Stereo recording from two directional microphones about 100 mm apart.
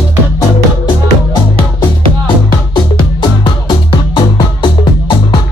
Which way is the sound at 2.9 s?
55° left (ahead or behind).